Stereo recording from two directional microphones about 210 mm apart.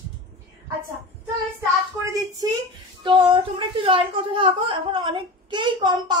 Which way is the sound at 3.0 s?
25° right (ahead or behind).